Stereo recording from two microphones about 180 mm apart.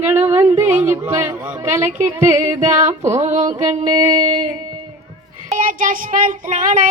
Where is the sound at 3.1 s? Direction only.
40° right (ahead or behind).